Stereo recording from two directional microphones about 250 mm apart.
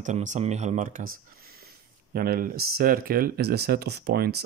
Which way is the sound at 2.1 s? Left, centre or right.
Right.